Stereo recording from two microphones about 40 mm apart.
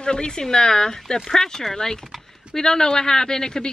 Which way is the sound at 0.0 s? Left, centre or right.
Left.